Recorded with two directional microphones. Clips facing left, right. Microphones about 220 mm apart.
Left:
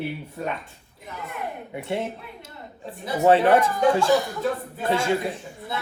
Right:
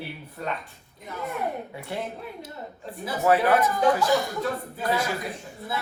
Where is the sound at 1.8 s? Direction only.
25° left (ahead or behind).